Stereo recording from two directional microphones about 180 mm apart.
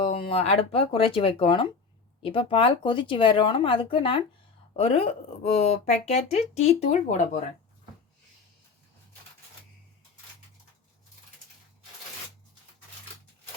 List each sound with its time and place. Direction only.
0.0 s speech: 30° left (ahead or behind)